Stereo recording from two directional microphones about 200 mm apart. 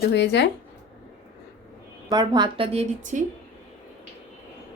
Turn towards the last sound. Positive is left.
turn(degrees=-35)  # may be behind; listen again after turning